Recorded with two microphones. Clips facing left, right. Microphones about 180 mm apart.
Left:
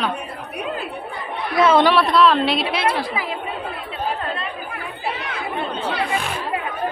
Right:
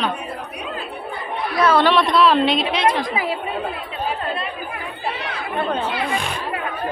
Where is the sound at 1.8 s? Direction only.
5° left (ahead or behind).